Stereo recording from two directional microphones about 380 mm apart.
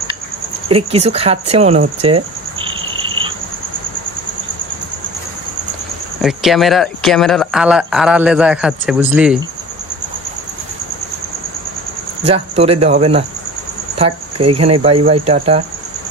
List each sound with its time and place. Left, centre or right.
0.7 s cricket: centre
6.2 s speech: centre
12.3 s cricket: centre
14.5 s cricket: centre